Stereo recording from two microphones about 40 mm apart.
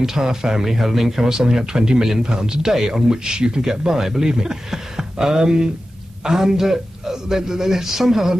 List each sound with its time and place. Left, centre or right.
0.0 s speech: centre